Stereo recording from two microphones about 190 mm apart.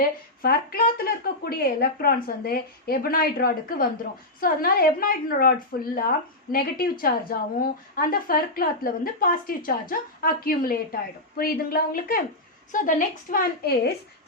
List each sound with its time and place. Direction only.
0.4 s a woman's voice: 50° left (ahead or behind)